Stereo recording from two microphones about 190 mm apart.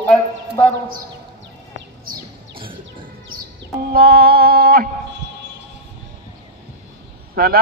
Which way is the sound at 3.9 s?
55° right (ahead or behind).